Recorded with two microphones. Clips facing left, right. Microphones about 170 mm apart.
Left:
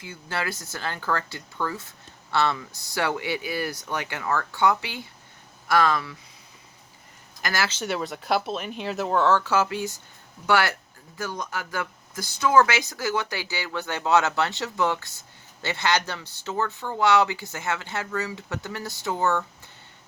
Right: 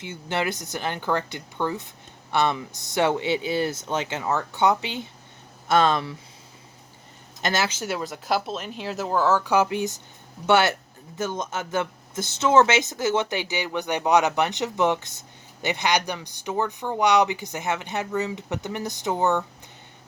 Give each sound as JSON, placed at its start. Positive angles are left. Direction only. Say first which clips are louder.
{"t": 0.0, "sound": "speech", "louder": "right 4 dB", "side_deg": -20}
{"t": 7.4, "sound": "speech", "louder": "right 3 dB", "side_deg": -20}
{"t": 7.7, "sound": "speech", "louder": "even", "side_deg": -5}
{"t": 9.4, "sound": "speech", "louder": "right 3 dB", "side_deg": -15}